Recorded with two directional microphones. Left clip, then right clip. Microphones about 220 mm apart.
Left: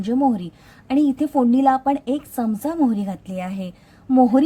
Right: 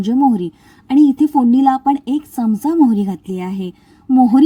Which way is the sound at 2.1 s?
10° right (ahead or behind).